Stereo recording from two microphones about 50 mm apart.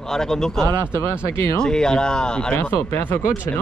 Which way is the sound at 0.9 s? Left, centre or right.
Left.